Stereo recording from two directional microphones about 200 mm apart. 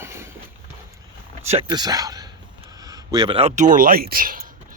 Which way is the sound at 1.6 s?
20° right (ahead or behind).